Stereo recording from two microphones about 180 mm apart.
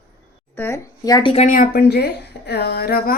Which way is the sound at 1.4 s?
50° left (ahead or behind).